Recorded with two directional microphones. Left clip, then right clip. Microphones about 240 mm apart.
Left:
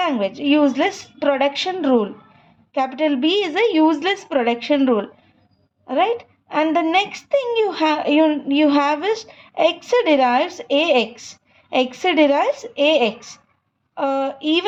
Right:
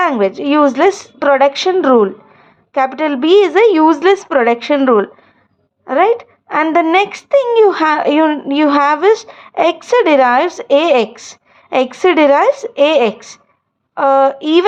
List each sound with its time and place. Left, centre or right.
0.0 s speech: right